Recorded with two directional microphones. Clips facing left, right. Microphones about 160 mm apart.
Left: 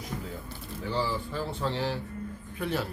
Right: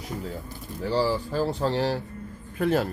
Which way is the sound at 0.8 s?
35° right (ahead or behind).